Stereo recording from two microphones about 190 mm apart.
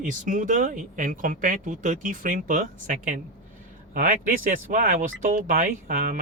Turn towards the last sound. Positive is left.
turn(degrees=-50)  # may be behind; listen again after turning